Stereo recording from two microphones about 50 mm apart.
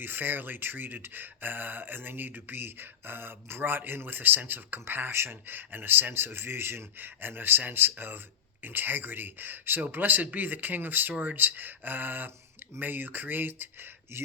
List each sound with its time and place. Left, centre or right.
0.0 s speech: right